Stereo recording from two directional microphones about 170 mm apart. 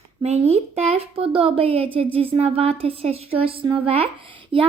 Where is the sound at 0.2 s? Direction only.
35° right (ahead or behind).